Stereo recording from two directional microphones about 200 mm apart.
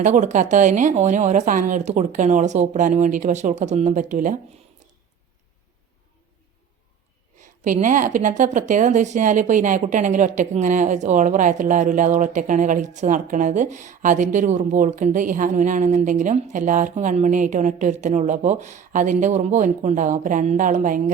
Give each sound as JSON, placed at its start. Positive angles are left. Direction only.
{"t": 0.0, "sound": "a woman's voice", "side_deg": -35}
{"t": 7.3, "sound": "a woman's voice", "side_deg": -40}